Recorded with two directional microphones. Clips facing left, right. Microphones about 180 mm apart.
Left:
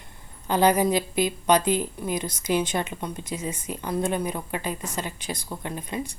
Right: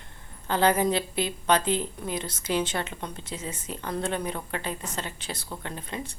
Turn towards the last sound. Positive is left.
turn(degrees=10)  # may be behind; listen again after turning